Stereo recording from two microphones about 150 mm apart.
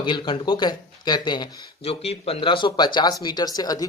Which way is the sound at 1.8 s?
40° left (ahead or behind).